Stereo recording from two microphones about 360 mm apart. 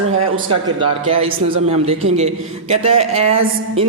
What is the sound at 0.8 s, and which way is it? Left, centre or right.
Speech, centre.